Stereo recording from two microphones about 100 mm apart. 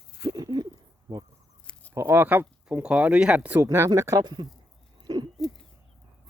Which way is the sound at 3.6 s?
25° right (ahead or behind).